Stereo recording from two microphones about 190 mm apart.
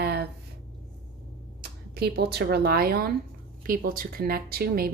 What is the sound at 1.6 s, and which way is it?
A woman's voice, 55° right (ahead or behind).